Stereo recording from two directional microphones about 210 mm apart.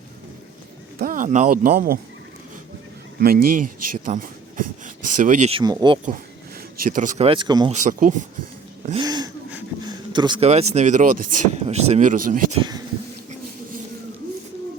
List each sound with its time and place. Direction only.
0.9 s speech: 40° right (ahead or behind)
3.2 s speech: 45° right (ahead or behind); by 6.0 s 20° right (ahead or behind)
6.8 s speech: 40° right (ahead or behind); by 7.7 s 20° right (ahead or behind)
7.7 s speech: 40° right (ahead or behind)
8.9 s a sound: 20° right (ahead or behind)
9.8 s speech: 20° right (ahead or behind); by 12.5 s 40° right (ahead or behind)